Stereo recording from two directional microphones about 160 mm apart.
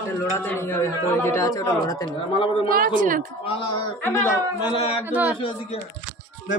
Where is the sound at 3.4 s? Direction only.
35° left (ahead or behind).